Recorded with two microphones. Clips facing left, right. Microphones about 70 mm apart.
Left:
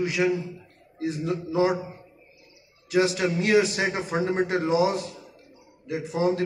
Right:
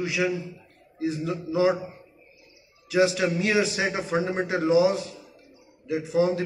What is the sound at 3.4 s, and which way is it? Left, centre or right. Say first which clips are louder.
A man's voice: left 5 dB; left.